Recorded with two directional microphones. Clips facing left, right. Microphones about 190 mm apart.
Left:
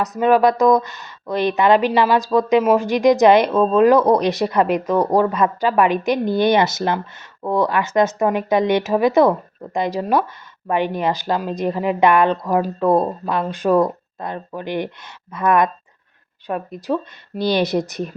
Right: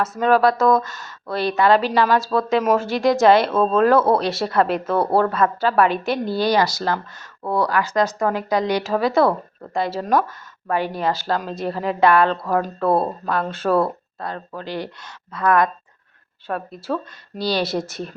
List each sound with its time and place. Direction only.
0.0 s speech: 15° left (ahead or behind)